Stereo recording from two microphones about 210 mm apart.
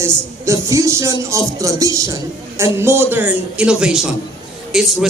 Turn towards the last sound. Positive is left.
turn(degrees=0)  # may be behind; listen again after turning